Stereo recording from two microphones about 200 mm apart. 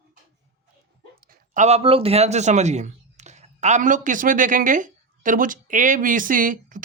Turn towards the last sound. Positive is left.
turn(degrees=-40)  # may be behind; listen again after turning